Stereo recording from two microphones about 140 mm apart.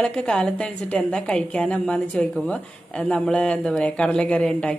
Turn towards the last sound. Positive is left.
turn(degrees=5)  # may be behind; listen again after turning